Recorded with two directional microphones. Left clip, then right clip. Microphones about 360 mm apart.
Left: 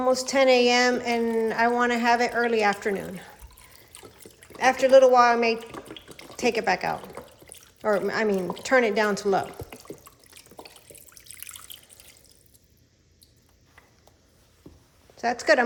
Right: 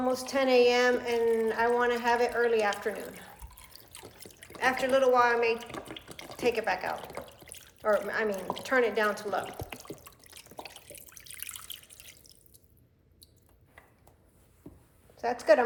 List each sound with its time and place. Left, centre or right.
0.1 s a woman's voice: centre
3.7 s trickle: centre
4.6 s a woman's voice: centre
5.7 s water: centre
6.3 s a woman's voice: centre
7.0 s drip: centre
8.0 s a woman's voice: centre
9.5 s drip: centre
15.2 s a woman's voice: centre